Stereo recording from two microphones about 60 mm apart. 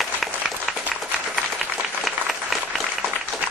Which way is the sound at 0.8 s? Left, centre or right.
Right.